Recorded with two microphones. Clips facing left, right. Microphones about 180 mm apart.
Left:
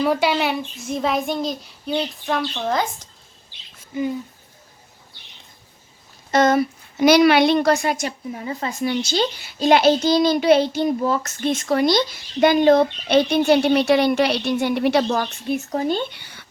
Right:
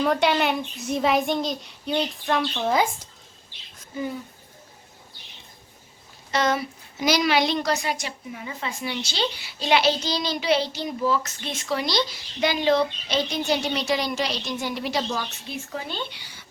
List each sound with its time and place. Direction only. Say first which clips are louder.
0.0 s a child's voice: left 2 dB; 5° left (ahead or behind)
3.8 s bird: left 6 dB; 15° left (ahead or behind)
6.3 s a woman's voice: left 7 dB; 50° left (ahead or behind)
15.6 s a woman's voice: left 8 dB; 40° left (ahead or behind); by 16.5 s 60° left (ahead or behind)